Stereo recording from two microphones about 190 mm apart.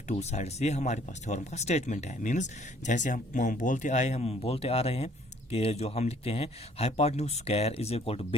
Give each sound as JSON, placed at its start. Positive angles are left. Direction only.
{"t": 0.1, "sound": "speech", "side_deg": 35}